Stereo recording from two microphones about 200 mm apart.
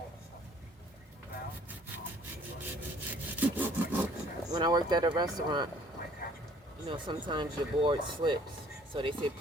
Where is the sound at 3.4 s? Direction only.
10° right (ahead or behind).